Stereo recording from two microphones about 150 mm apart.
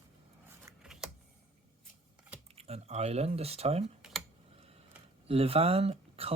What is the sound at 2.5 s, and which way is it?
Speech, 45° right (ahead or behind).